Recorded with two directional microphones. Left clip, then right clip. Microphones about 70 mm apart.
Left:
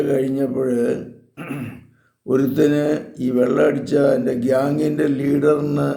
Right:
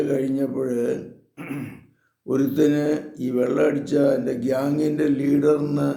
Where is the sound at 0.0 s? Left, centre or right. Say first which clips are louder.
Left 4 dB; left.